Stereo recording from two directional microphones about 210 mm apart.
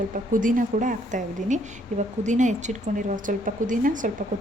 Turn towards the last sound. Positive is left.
turn(degrees=-40)  # may be behind; listen again after turning